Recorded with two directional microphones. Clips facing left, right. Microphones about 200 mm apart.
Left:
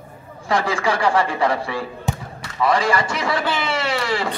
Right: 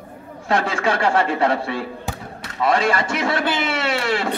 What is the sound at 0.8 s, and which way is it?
Speech, 25° right (ahead or behind).